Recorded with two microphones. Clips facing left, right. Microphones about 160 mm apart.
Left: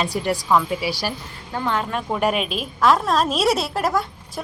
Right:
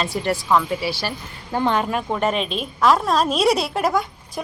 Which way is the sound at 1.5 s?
20° right (ahead or behind).